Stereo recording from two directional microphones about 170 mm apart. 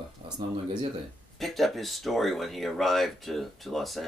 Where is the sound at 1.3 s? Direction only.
Centre (ahead or behind).